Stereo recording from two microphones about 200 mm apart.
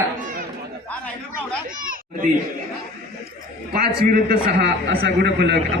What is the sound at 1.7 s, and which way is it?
Children playing, 45° right (ahead or behind).